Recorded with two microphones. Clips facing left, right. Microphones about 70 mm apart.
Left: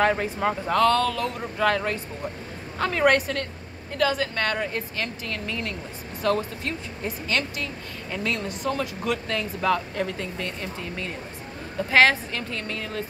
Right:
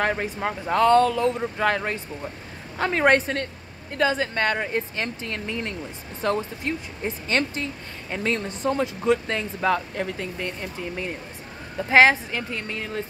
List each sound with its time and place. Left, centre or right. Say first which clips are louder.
0.0 s speech: left 2 dB; centre
0.7 s speech: right 4 dB; right